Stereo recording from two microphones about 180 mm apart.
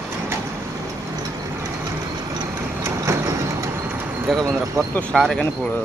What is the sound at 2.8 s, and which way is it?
Vehicle, 15° right (ahead or behind).